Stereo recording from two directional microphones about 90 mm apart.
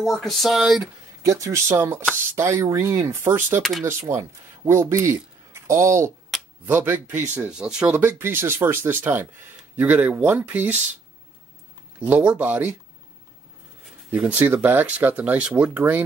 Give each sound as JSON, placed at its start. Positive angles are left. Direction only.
{"t": 0.0, "sound": "speech", "side_deg": 0}
{"t": 1.2, "sound": "speech", "side_deg": -35}
{"t": 6.6, "sound": "speech", "side_deg": -20}
{"t": 7.4, "sound": "speech", "side_deg": -10}
{"t": 12.0, "sound": "speech", "side_deg": -15}
{"t": 14.1, "sound": "speech", "side_deg": -15}